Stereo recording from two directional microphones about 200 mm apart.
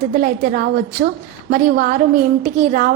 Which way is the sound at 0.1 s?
45° right (ahead or behind).